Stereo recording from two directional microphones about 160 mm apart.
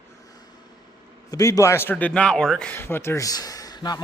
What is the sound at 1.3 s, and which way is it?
A man's voice, 20° left (ahead or behind).